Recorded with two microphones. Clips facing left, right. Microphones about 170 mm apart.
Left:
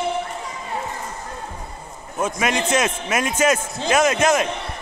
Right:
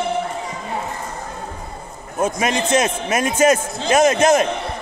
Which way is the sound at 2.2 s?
35° right (ahead or behind).